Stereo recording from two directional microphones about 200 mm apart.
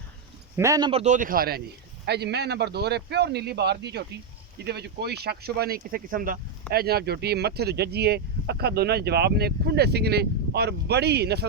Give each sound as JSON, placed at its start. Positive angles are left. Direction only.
{"t": 0.5, "sound": "a man's voice", "side_deg": -15}
{"t": 0.9, "sound": "speech", "side_deg": -30}